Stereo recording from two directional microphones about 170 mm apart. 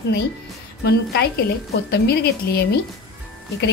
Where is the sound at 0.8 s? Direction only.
75° left (ahead or behind).